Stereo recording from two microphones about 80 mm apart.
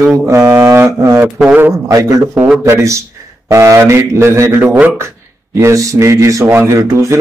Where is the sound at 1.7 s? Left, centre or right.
Right.